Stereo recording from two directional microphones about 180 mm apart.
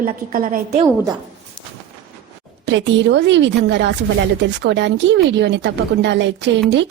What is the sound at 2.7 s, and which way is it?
A woman's voice, 85° right.